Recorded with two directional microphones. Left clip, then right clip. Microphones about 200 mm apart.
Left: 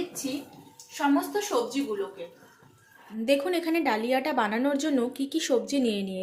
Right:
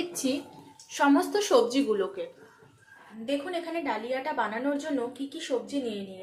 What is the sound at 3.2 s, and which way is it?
A woman's voice, 50° left (ahead or behind).